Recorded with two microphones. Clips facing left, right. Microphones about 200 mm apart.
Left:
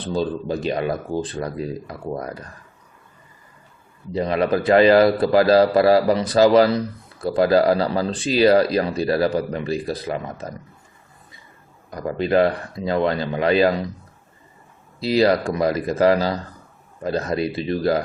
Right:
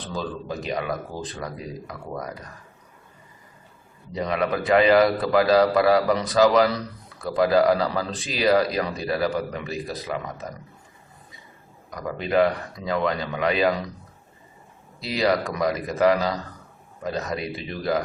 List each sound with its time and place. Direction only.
0.2 s speech: 30° left (ahead or behind)
4.1 s a man's voice: 30° left (ahead or behind)
11.9 s a man's voice: 30° left (ahead or behind)
15.0 s a man's voice: 30° left (ahead or behind)